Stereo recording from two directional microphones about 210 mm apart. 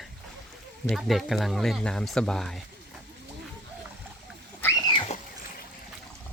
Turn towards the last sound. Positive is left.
turn(degrees=20)  # may be behind; listen again after turning